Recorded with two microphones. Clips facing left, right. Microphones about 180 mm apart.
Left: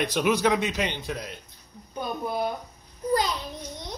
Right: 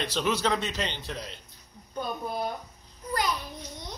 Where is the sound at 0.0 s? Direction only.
15° left (ahead or behind).